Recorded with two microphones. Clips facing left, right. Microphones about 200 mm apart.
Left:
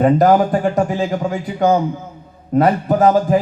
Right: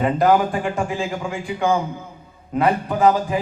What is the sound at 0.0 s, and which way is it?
A man's voice, 40° left (ahead or behind).